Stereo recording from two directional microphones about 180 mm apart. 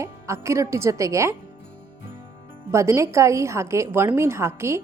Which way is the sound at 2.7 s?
15° right (ahead or behind).